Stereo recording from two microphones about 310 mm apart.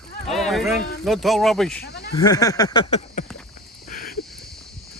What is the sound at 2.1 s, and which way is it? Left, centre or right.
Speech, centre.